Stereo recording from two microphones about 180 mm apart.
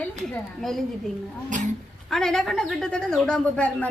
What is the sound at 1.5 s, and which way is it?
Speech, 45° right (ahead or behind).